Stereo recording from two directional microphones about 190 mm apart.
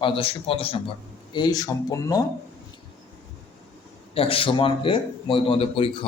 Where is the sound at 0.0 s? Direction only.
25° left (ahead or behind).